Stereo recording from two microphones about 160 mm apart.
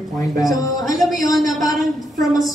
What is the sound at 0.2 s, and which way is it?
Speech, 20° left (ahead or behind).